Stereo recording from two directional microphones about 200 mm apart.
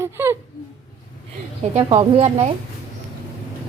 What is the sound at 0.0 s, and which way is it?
Whimper, 10° right (ahead or behind).